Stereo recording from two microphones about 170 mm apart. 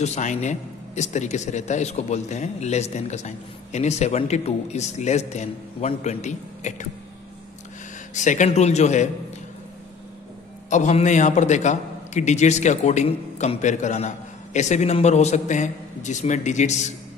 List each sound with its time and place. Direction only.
0.0 s a man's voice: 45° left (ahead or behind)
8.1 s a man's voice: 45° left (ahead or behind)
10.7 s a man's voice: 45° left (ahead or behind)